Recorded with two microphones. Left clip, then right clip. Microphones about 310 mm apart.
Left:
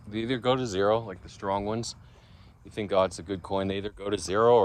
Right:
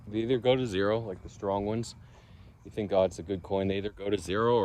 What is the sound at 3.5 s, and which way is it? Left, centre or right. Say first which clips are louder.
Speech: left 1 dB; left.